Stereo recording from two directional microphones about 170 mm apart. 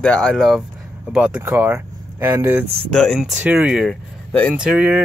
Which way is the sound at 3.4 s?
5° right (ahead or behind).